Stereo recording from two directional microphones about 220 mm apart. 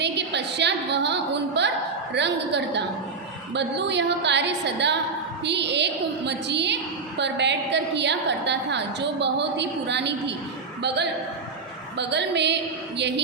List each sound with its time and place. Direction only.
0.0 s a woman's voice: 50° right (ahead or behind)